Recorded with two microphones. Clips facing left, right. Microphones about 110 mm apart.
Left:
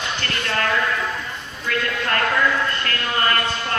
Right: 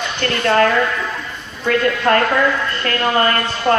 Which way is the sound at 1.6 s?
40° right (ahead or behind).